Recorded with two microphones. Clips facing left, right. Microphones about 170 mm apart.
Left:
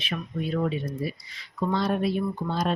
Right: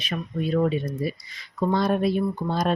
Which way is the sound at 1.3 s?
45° right (ahead or behind).